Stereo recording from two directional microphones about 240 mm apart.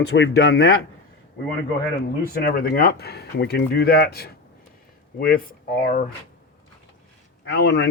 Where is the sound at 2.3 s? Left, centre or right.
Left.